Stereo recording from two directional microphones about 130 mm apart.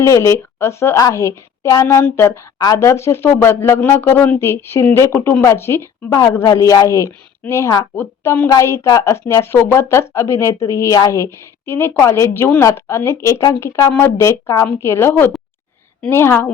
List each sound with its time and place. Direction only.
0.0 s a woman's voice: 25° left (ahead or behind)